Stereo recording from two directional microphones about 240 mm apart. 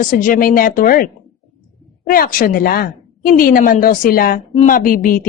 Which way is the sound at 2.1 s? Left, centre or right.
Left.